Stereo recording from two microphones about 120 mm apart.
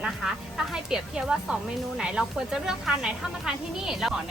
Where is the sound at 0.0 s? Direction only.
5° right (ahead or behind).